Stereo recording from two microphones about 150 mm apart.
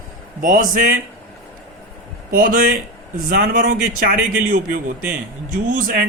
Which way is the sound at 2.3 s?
70° right (ahead or behind).